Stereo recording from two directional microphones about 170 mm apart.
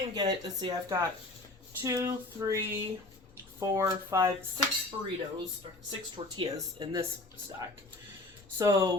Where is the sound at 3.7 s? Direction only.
20° right (ahead or behind).